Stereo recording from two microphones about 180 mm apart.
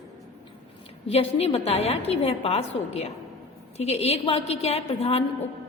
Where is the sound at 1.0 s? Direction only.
35° left (ahead or behind).